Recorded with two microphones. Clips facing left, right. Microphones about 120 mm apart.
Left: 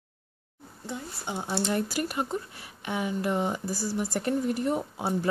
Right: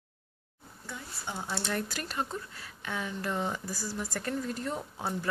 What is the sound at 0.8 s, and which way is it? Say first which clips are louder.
Speech: left 5 dB; 25° left (ahead or behind).